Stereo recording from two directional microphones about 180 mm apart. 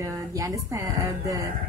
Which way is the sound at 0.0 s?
15° right (ahead or behind).